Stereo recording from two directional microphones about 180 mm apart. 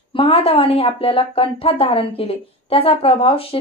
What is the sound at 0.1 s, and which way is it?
Speech, 30° left (ahead or behind).